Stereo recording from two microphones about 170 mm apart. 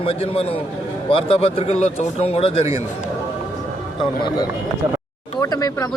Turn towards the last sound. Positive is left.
turn(degrees=20)  # may be behind; listen again after turning